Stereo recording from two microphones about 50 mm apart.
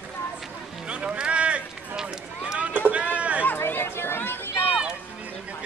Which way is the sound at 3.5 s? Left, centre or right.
Left.